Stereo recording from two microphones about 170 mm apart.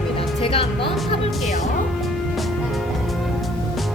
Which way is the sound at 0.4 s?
30° left (ahead or behind).